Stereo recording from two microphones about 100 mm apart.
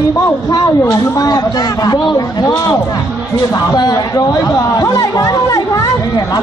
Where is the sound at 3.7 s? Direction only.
40° left (ahead or behind).